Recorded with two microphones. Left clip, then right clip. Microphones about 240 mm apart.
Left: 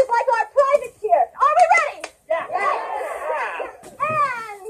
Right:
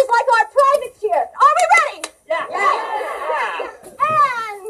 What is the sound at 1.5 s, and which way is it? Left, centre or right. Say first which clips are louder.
Hands: left 1 dB; right.